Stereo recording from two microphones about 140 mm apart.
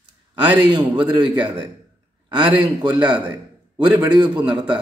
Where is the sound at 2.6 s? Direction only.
30° right (ahead or behind).